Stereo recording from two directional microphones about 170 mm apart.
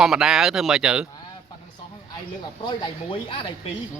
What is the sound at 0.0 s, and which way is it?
Speech, 5° right (ahead or behind).